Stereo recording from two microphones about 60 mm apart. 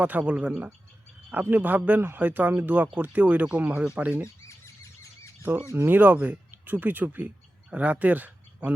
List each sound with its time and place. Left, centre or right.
0.0 s speech: right
1.3 s speech: right
4.4 s squeal: left
5.4 s speech: right